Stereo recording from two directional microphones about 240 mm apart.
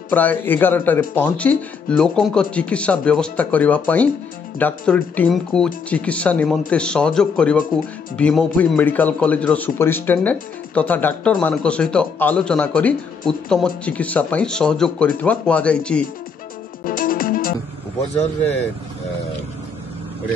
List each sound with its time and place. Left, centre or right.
0.1 s speech: centre
16.8 s music: left
18.1 s speech: left